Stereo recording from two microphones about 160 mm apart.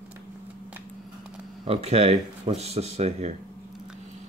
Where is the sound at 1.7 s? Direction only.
40° right (ahead or behind).